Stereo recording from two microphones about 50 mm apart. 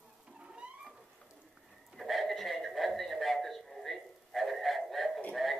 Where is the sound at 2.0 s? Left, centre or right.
Centre.